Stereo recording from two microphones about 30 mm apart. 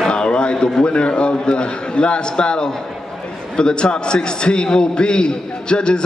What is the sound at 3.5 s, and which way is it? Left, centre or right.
A man's voice, left.